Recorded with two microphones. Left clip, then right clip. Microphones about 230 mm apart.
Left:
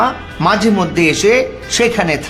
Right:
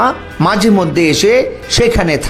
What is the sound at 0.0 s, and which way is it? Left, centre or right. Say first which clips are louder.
Speech: right 2 dB; right.